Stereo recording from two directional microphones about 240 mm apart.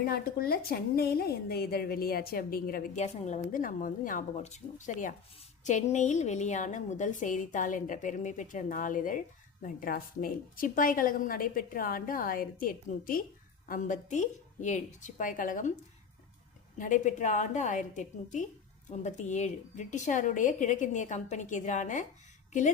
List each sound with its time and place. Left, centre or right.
0.0 s speech: left
16.7 s speech: left